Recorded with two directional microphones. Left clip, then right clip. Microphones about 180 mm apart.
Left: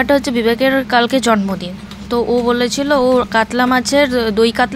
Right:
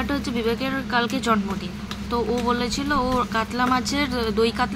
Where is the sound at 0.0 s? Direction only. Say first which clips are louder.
Left 12 dB; 45° left (ahead or behind).